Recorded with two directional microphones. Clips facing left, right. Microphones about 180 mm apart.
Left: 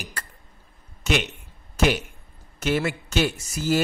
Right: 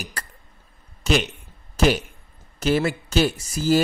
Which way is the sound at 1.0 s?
35° right (ahead or behind).